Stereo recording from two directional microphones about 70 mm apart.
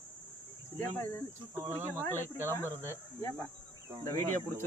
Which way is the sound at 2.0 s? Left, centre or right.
Left.